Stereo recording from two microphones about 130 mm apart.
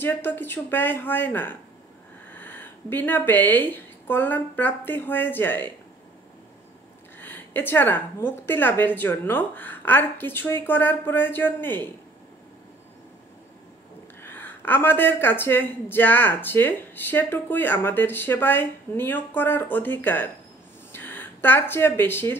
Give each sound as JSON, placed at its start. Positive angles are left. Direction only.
{"t": 0.0, "sound": "a woman's voice", "side_deg": 15}
{"t": 7.2, "sound": "a woman's voice", "side_deg": 15}
{"t": 14.2, "sound": "a woman's voice", "side_deg": 15}